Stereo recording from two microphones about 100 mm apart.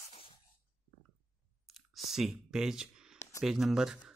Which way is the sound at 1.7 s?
Centre (ahead or behind).